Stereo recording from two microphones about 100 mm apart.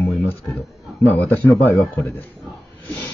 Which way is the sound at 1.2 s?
25° left (ahead or behind).